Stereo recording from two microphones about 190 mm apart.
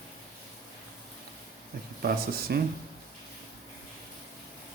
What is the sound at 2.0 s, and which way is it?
Speech, 50° right (ahead or behind).